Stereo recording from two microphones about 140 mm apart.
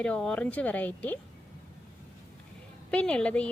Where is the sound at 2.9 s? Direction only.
10° left (ahead or behind).